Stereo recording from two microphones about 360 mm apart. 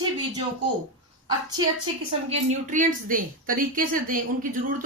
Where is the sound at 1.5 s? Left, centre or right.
Centre.